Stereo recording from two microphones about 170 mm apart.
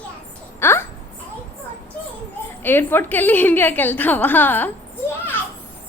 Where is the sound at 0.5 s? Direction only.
15° left (ahead or behind).